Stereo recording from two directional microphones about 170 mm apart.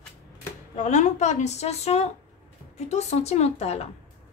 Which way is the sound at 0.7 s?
45° left (ahead or behind).